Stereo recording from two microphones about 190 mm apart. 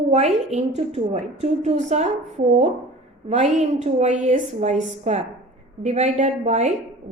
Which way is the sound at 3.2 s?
35° right (ahead or behind).